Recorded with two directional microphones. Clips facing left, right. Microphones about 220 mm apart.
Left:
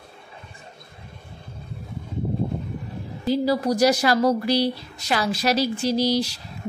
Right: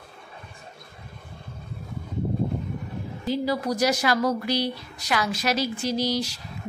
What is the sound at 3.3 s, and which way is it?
A woman's voice, 35° left (ahead or behind).